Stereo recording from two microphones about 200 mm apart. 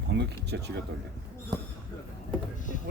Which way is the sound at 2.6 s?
40° left (ahead or behind).